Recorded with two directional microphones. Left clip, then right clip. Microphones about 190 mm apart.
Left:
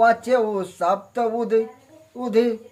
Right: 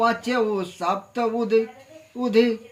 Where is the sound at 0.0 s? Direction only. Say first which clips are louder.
Left 4 dB; 20° left (ahead or behind).